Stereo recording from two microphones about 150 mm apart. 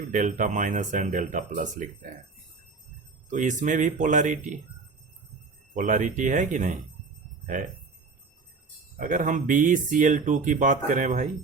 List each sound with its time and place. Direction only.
0.1 s speech: 60° right (ahead or behind)
3.2 s speech: 55° right (ahead or behind)
5.7 s speech: 60° right (ahead or behind)
9.0 s speech: 65° right (ahead or behind)